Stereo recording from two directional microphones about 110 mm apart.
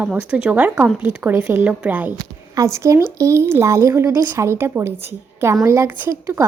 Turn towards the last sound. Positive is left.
turn(degrees=-25)  # may be behind; listen again after turning